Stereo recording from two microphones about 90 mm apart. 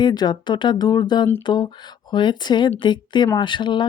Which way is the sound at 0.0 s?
50° left (ahead or behind).